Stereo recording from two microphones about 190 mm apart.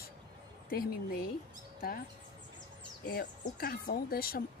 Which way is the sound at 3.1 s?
55° left (ahead or behind).